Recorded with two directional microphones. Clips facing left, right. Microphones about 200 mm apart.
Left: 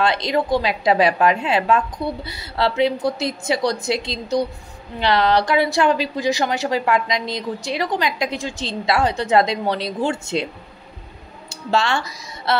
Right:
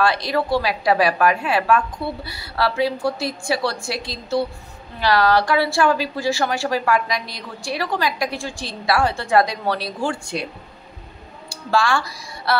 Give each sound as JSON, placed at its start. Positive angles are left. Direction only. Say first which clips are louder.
{"t": 0.0, "sound": "a woman's voice", "louder": "left 1 dB", "side_deg": 20}
{"t": 11.4, "sound": "speech", "louder": "even", "side_deg": 20}